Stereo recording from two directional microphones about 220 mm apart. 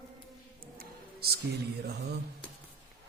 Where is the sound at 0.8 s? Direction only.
45° right (ahead or behind).